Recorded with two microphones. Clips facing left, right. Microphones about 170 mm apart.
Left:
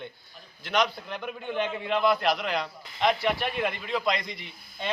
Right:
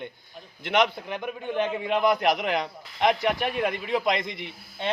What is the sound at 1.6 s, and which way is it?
Speech, 15° right (ahead or behind).